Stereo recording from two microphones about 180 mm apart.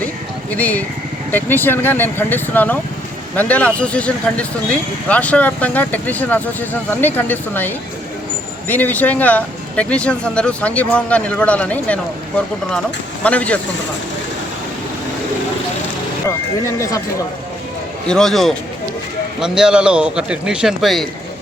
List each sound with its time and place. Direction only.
0.5 s a man's voice: 10° left (ahead or behind)
13.2 s a man's voice: 10° left (ahead or behind)
16.7 s a man's voice: 15° left (ahead or behind)
18.1 s speech: centre (ahead or behind)